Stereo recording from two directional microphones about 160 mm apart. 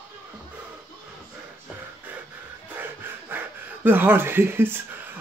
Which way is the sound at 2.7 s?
15° right (ahead or behind).